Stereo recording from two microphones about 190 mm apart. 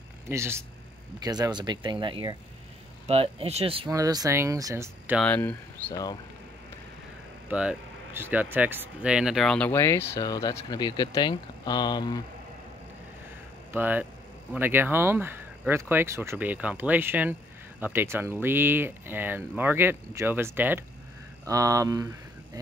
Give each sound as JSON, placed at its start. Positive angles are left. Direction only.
{"t": 0.3, "sound": "speech", "side_deg": -15}
{"t": 3.9, "sound": "speech", "side_deg": -20}
{"t": 5.2, "sound": "speech", "side_deg": 10}
{"t": 5.9, "sound": "speech", "side_deg": 20}
{"t": 7.4, "sound": "speech", "side_deg": -10}
{"t": 13.7, "sound": "speech", "side_deg": -10}